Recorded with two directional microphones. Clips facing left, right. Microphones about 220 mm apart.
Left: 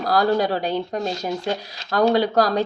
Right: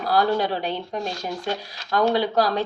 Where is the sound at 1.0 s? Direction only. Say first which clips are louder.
Left 4 dB; 20° left (ahead or behind).